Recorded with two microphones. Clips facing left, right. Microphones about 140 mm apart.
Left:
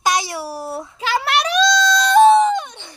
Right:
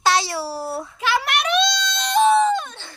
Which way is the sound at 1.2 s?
30° left (ahead or behind).